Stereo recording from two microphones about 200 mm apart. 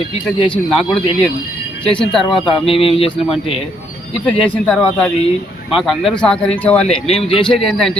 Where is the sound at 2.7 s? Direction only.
30° left (ahead or behind).